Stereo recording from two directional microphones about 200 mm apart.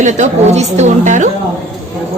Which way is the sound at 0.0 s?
35° right (ahead or behind).